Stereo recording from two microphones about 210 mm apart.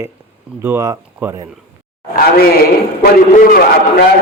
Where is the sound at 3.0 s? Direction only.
45° left (ahead or behind).